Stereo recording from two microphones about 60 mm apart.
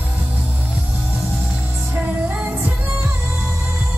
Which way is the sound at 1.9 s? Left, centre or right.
Right.